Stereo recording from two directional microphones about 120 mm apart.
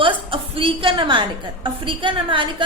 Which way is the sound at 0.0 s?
50° right (ahead or behind).